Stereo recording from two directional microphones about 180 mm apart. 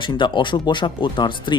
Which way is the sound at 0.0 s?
25° left (ahead or behind).